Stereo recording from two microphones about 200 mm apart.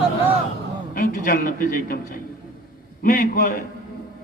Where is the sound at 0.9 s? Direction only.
45° left (ahead or behind).